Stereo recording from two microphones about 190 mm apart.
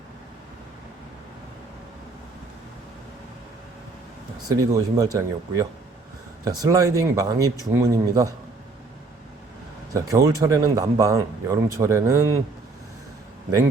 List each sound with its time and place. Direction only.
4.4 s speech: 15° right (ahead or behind)
9.9 s speech: 15° right (ahead or behind)